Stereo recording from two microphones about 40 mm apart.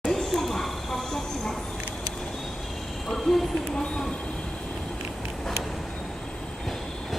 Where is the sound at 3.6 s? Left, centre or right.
Centre.